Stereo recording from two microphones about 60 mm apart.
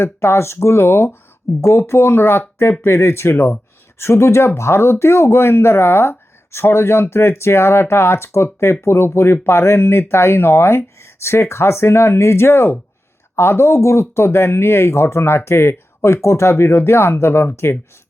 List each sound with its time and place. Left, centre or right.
0.0 s speech: left
1.5 s speech: left
1.9 s speech: left
3.3 s speech: left
3.9 s speech: left